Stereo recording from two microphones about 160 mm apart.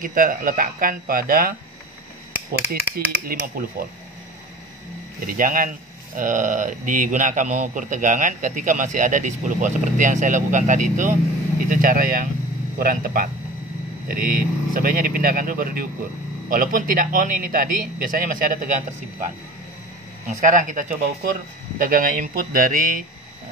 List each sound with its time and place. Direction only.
0.0 s a man's voice: 60° right (ahead or behind)
3.6 s a man's voice: 65° right (ahead or behind)
5.2 s a man's voice: 60° right (ahead or behind)